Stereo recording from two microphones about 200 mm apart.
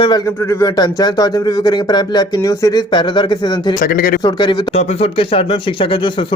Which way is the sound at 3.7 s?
45° left (ahead or behind).